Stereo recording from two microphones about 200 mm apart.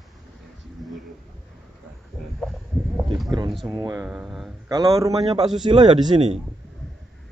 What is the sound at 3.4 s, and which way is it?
Speech, centre (ahead or behind).